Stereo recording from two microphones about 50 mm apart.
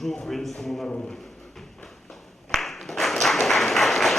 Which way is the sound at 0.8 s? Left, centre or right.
Centre.